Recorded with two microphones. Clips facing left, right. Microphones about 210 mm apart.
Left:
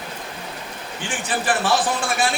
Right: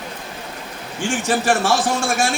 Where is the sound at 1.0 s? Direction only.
45° right (ahead or behind).